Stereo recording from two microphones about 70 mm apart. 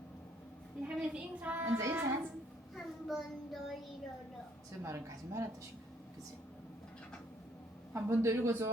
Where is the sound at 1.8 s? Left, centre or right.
Right.